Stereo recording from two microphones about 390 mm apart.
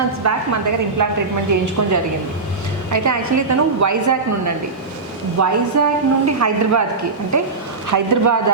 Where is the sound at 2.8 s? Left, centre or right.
Right.